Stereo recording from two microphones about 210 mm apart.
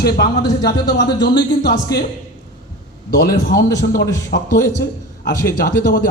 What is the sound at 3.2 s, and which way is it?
A man's voice, 40° left (ahead or behind).